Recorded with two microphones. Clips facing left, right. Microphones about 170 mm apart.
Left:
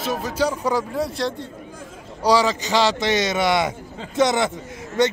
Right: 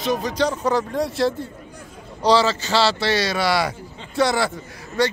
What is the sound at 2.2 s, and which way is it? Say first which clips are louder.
A man's voice: right 1 dB; 10° left (ahead or behind).